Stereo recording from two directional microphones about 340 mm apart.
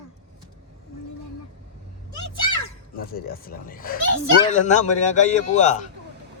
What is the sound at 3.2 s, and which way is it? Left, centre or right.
Speech, left.